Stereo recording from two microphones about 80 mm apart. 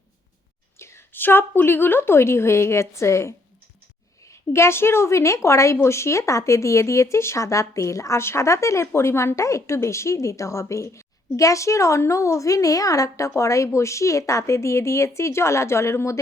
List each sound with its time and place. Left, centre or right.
0.8 s a woman's voice: left